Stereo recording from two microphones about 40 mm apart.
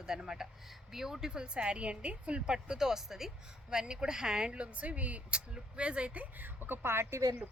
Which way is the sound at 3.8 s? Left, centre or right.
Right.